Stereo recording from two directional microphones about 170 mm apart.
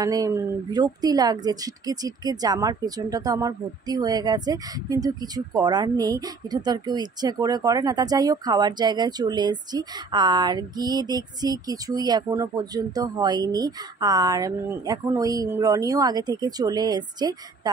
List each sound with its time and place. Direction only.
0.0 s a woman's voice: 20° right (ahead or behind)